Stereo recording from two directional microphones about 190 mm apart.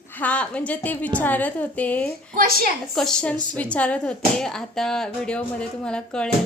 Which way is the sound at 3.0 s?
5° left (ahead or behind).